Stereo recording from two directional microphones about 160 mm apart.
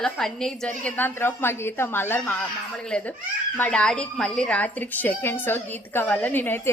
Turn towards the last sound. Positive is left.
turn(degrees=15)  # may be behind; listen again after turning